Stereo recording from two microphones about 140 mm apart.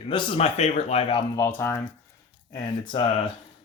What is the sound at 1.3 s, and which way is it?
Speech, 15° left (ahead or behind).